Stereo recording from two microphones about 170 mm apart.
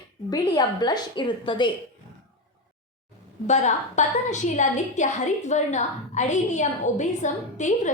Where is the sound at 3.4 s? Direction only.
40° left (ahead or behind).